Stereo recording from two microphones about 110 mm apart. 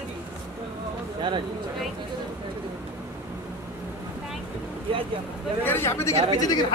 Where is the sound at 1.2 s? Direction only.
45° right (ahead or behind).